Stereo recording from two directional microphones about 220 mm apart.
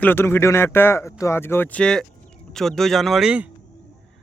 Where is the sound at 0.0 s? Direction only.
10° left (ahead or behind).